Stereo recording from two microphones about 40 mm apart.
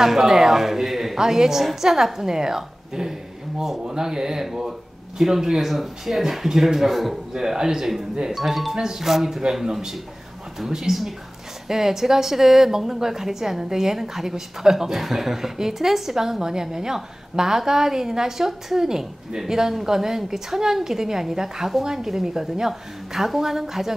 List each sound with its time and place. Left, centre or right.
0.0 s a woman's voice: centre
4.5 s speech: centre
7.3 s a woman's voice: centre